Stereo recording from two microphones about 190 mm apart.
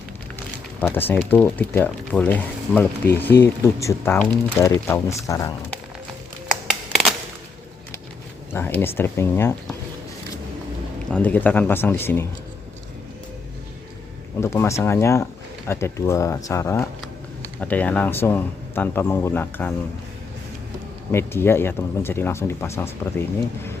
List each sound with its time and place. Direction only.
0.8 s speech: 10° left (ahead or behind)
8.5 s speech: 10° left (ahead or behind)
11.1 s speech: 10° left (ahead or behind)
14.3 s speech: 15° left (ahead or behind)
21.1 s speech: 10° left (ahead or behind)